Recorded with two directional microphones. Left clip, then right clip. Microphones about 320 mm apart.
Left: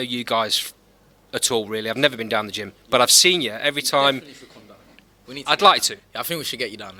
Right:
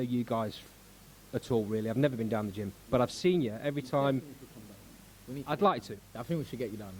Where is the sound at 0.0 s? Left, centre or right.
Centre.